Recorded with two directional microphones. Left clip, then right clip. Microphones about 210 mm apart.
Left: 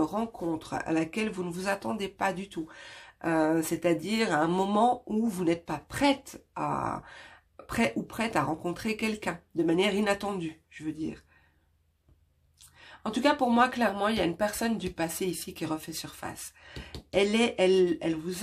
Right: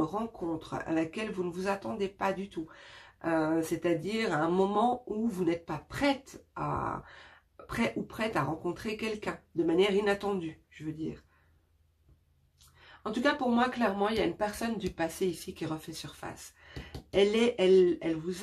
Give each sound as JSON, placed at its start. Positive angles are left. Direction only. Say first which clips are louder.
{"t": 0.0, "sound": "speech", "louder": "left 3 dB", "side_deg": 45}
{"t": 12.8, "sound": "speech", "louder": "left 3 dB", "side_deg": 45}